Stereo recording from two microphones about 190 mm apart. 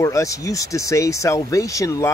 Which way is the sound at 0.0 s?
15° left (ahead or behind).